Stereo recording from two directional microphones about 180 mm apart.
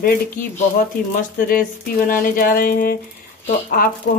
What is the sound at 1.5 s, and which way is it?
Speech, 50° left (ahead or behind).